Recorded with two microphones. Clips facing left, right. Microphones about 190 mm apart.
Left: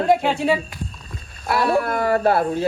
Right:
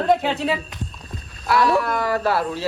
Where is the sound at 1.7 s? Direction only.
55° left (ahead or behind).